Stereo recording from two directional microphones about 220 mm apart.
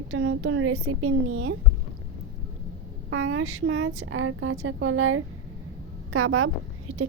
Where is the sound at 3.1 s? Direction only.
70° right (ahead or behind).